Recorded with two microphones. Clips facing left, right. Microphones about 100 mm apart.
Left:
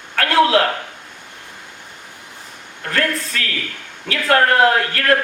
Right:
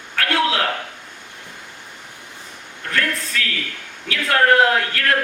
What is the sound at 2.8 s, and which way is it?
Speech, 40° left (ahead or behind).